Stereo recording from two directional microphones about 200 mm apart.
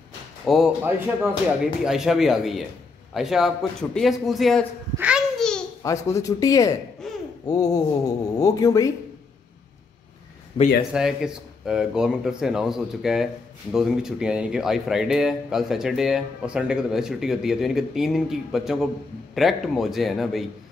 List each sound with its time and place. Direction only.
0.5 s speech: 5° right (ahead or behind)
4.9 s a sound: 5° right (ahead or behind)
5.8 s speech: 15° left (ahead or behind)
7.0 s babbling: centre (ahead or behind)
7.4 s a sound: 20° left (ahead or behind)
8.4 s speech: 15° left (ahead or behind)
10.9 s speech: 5° right (ahead or behind)